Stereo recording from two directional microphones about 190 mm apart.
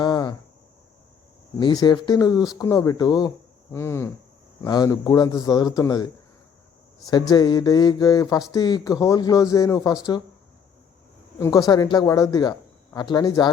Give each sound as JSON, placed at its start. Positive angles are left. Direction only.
{"t": 0.0, "sound": "a sound", "side_deg": 20}
{"t": 1.5, "sound": "speech", "side_deg": 25}
{"t": 7.1, "sound": "speech", "side_deg": 20}
{"t": 11.3, "sound": "speech", "side_deg": 15}